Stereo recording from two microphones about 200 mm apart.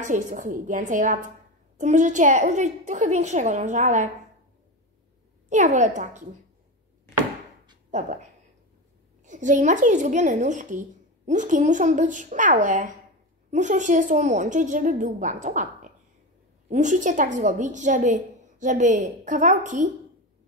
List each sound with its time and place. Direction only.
0.0 s a woman's voice: 40° right (ahead or behind)
5.5 s a woman's voice: 35° right (ahead or behind)
7.9 s a woman's voice: 40° right (ahead or behind)